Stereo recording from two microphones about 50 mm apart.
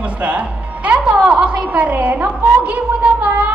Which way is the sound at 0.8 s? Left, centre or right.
Right.